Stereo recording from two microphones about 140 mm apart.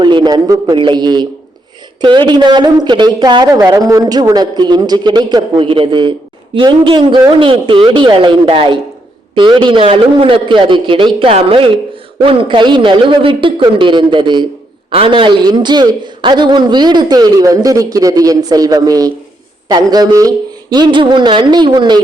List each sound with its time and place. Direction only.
0.0 s a man's voice: 35° right (ahead or behind)